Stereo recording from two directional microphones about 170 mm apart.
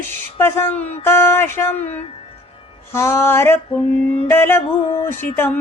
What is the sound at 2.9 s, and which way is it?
Mantra, 15° left (ahead or behind).